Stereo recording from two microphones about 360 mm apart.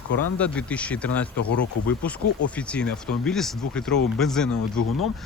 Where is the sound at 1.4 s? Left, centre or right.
Left.